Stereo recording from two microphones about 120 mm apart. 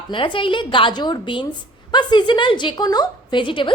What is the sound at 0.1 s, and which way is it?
A woman's voice, 45° left (ahead or behind).